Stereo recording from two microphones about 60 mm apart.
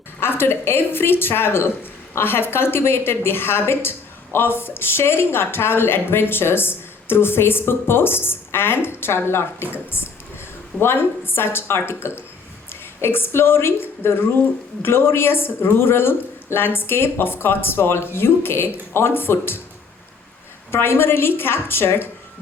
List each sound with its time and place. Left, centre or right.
0.2 s speech: left
20.7 s speech: left